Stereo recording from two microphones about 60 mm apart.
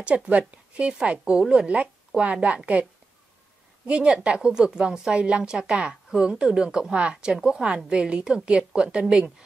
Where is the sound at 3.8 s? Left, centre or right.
Centre.